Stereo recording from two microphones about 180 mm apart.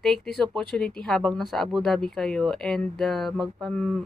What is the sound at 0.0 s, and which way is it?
Speech, centre (ahead or behind).